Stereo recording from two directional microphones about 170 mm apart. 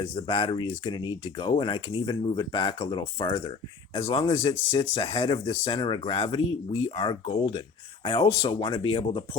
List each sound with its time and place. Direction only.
0.0 s speech: 30° left (ahead or behind)